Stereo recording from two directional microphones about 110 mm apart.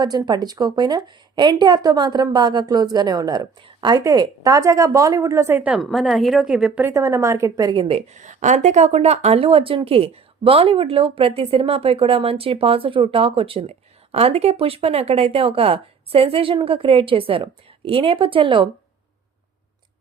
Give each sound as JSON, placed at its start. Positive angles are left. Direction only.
{"t": 0.0, "sound": "a woman's voice", "side_deg": -40}
{"t": 5.8, "sound": "a woman's voice", "side_deg": 0}
{"t": 6.7, "sound": "a woman's voice", "side_deg": -20}
{"t": 7.8, "sound": "speech", "side_deg": -60}